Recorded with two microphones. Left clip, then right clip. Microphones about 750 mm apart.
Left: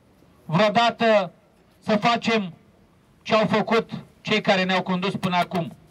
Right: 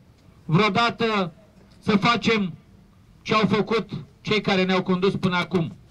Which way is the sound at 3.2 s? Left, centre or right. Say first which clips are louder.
Left 1 dB; centre.